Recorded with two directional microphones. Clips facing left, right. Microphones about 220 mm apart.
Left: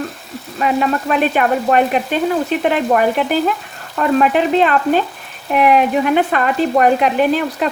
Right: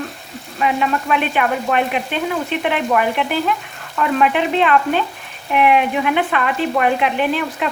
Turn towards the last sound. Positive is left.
turn(degrees=40)  # may be behind; listen again after turning